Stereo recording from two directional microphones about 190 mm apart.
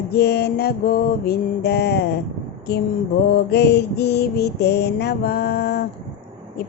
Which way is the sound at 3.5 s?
60° left (ahead or behind).